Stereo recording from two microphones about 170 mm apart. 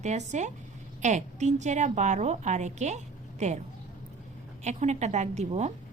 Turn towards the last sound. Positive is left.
turn(degrees=-40)  # may be behind; listen again after turning